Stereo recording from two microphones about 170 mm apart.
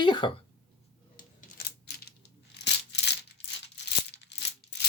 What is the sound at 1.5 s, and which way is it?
Coin, 50° left (ahead or behind).